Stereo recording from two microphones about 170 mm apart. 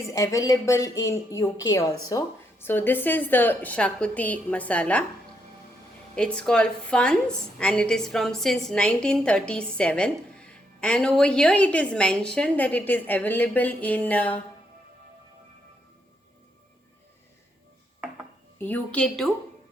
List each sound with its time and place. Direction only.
0.1 s a woman's voice: 20° left (ahead or behind)
6.1 s a woman's voice: 5° left (ahead or behind)
18.6 s a woman's voice: 10° left (ahead or behind)